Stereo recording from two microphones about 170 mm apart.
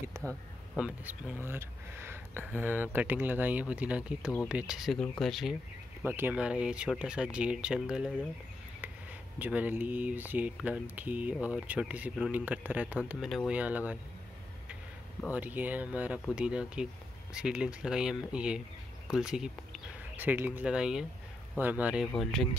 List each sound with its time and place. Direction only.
0.2 s speech: 15° right (ahead or behind)
0.7 s speech: 5° right (ahead or behind)
6.0 s speech: 10° right (ahead or behind)
9.4 s speech: 10° right (ahead or behind)
15.3 s speech: 10° right (ahead or behind)